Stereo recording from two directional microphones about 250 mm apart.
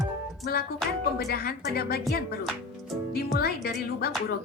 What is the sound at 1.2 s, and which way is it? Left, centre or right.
Speech, left.